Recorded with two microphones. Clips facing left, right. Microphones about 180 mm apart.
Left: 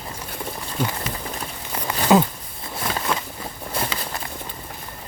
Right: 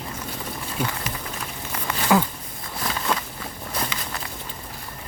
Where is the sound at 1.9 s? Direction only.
20° left (ahead or behind).